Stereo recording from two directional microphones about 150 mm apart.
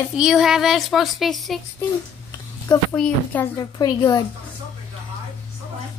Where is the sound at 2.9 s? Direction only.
10° left (ahead or behind).